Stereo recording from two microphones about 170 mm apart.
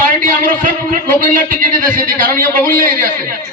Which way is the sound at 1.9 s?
55° right (ahead or behind).